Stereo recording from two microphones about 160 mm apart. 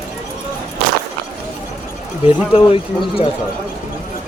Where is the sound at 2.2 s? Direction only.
35° left (ahead or behind).